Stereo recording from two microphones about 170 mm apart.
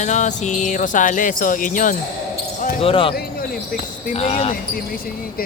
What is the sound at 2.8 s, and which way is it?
Speech, 30° left (ahead or behind).